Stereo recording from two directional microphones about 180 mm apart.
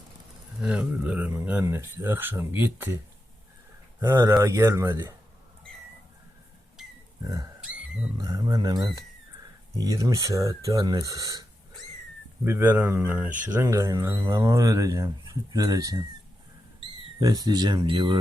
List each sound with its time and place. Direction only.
0.6 s speech: 5° right (ahead or behind)
4.0 s speech: 15° right (ahead or behind)
6.8 s a sound: centre (ahead or behind)
8.2 s speech: 20° right (ahead or behind)
12.5 s speech: 10° right (ahead or behind)